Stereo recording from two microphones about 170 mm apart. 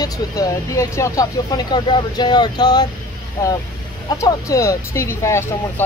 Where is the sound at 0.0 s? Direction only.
20° left (ahead or behind).